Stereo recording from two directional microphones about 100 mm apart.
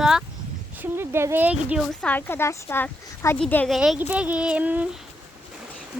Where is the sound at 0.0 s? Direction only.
5° right (ahead or behind).